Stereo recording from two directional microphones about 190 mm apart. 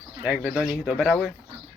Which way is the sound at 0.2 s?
10° right (ahead or behind).